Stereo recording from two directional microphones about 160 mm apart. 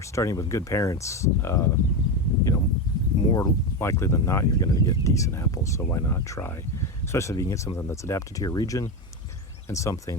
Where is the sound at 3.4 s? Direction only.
15° left (ahead or behind).